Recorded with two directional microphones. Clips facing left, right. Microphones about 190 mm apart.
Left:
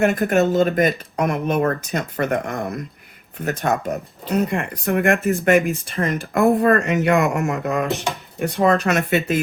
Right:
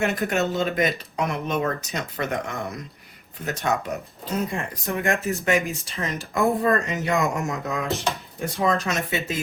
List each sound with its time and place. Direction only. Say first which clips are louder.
0.0 s speech: left 6 dB; 55° left (ahead or behind)
7.9 s speech: left 2 dB; 15° left (ahead or behind)
8.4 s speech: left 7 dB; 60° left (ahead or behind)